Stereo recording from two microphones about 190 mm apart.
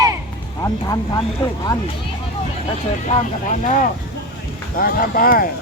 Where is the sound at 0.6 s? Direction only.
20° left (ahead or behind).